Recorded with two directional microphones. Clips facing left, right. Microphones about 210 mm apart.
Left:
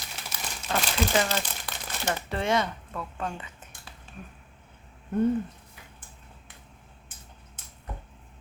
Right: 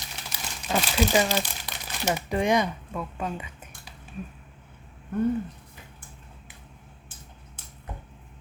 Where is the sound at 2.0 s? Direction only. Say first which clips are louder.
Right 4 dB; 15° right (ahead or behind).